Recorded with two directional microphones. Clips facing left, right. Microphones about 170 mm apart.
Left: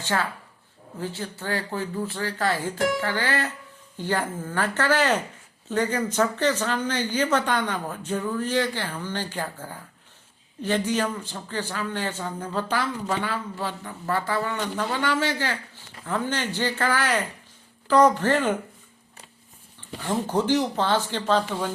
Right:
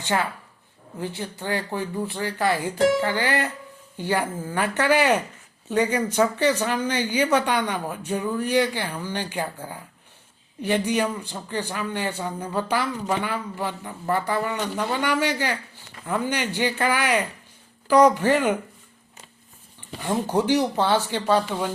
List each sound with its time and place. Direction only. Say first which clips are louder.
0.0 s speech: right 2 dB; 20° right (ahead or behind)
20.0 s speech: right 2 dB; 15° right (ahead or behind)